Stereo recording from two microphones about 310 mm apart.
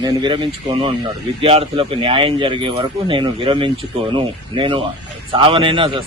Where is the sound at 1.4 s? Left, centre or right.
Centre.